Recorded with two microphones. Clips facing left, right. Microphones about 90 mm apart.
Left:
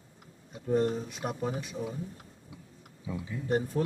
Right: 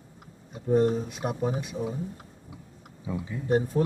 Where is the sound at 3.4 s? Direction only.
15° right (ahead or behind).